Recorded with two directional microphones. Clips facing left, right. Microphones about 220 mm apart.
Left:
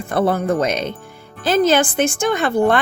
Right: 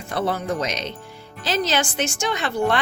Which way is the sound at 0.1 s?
55° left (ahead or behind).